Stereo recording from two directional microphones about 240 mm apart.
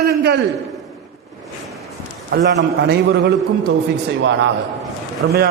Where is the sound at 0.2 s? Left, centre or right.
Right.